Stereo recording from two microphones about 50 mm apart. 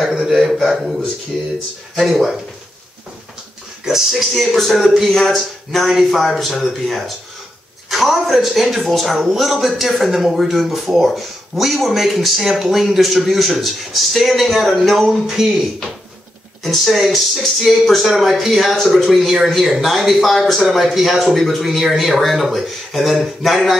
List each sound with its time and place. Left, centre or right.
0.0 s a man's voice: centre
3.8 s a man's voice: centre
16.6 s a man's voice: centre